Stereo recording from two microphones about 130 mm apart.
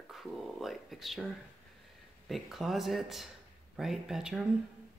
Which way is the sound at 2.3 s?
Centre (ahead or behind).